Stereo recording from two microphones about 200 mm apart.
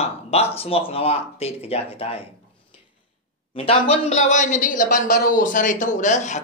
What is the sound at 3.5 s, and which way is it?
Speech, 30° left (ahead or behind).